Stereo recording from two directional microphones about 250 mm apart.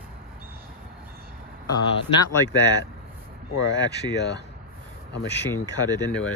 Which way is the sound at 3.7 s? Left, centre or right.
Left.